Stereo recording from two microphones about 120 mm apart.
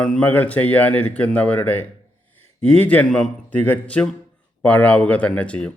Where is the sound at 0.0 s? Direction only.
10° left (ahead or behind).